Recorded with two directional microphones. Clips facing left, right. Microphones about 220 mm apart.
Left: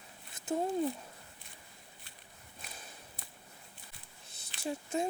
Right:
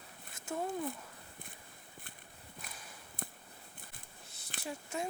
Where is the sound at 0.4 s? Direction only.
20° left (ahead or behind).